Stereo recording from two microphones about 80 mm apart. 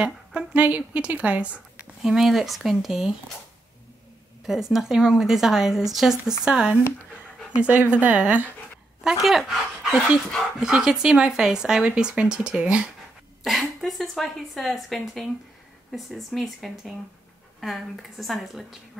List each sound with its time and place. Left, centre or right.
0.0 s speech: centre
2.0 s speech: centre
4.5 s speech: centre
7.6 s speech: right
9.0 s speech: centre
13.4 s speech: centre